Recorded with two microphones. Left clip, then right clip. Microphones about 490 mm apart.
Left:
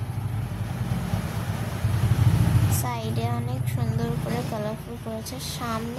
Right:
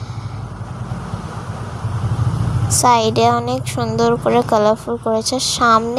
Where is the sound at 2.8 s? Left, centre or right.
Left.